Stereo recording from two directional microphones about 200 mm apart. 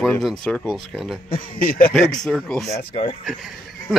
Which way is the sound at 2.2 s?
Centre (ahead or behind).